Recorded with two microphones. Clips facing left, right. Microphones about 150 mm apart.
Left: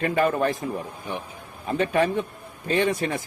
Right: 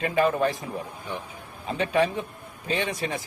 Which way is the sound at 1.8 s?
50° left (ahead or behind).